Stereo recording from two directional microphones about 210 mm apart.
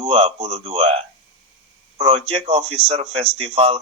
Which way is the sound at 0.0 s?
25° right (ahead or behind).